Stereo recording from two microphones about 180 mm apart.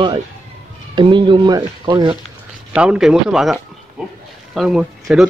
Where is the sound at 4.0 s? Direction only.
5° right (ahead or behind).